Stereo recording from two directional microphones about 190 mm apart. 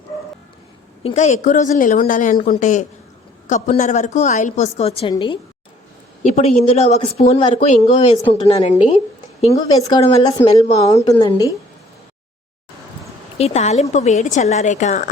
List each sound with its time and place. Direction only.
1.0 s speech: 40° left (ahead or behind)
9.5 s speech: 20° left (ahead or behind)
10.6 s a woman's voice: 15° left (ahead or behind)
13.4 s speech: 35° left (ahead or behind)